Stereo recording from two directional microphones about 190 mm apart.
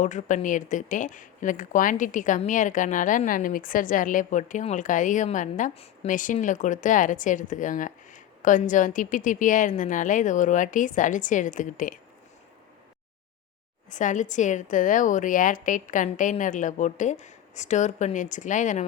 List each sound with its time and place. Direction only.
0.0 s speech: 40° left (ahead or behind)
13.9 s a woman's voice: 40° left (ahead or behind)